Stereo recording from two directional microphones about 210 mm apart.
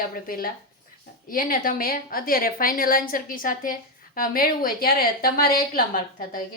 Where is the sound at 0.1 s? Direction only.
45° left (ahead or behind).